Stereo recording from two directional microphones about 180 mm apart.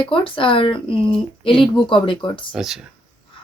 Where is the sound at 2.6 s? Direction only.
Centre (ahead or behind).